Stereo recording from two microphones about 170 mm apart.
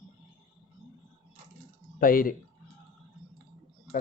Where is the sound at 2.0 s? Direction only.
55° left (ahead or behind).